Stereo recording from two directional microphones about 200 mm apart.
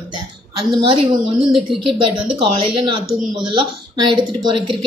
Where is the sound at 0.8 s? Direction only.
25° right (ahead or behind).